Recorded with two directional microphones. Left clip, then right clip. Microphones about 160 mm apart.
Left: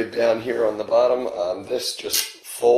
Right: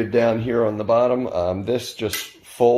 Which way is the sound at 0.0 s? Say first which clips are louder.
Right 1 dB; 5° left (ahead or behind).